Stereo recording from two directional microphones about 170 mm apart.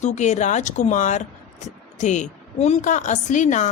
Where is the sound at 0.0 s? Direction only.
45° left (ahead or behind).